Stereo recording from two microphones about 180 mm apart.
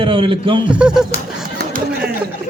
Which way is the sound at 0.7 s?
5° right (ahead or behind).